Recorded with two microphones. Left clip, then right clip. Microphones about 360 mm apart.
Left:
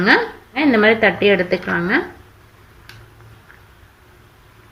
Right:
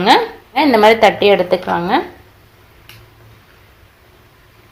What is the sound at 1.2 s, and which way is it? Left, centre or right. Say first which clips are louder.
Speech: right 4 dB; right.